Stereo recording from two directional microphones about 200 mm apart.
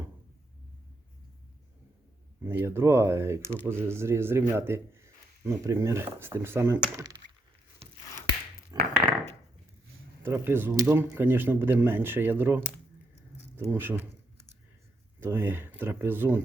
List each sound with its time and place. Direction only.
2.4 s a man's voice: 10° right (ahead or behind)
8.7 s a sound: 20° right (ahead or behind)
10.2 s speech: 10° right (ahead or behind)
15.2 s speech: 10° right (ahead or behind)